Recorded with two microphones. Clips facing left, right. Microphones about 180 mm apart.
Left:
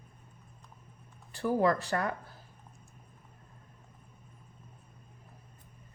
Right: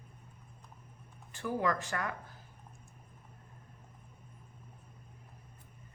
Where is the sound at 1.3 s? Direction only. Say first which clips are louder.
Left 6 dB; 35° left (ahead or behind).